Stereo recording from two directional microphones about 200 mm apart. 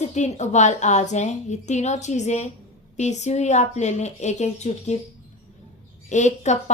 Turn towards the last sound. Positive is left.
turn(degrees=35)  # may be behind; listen again after turning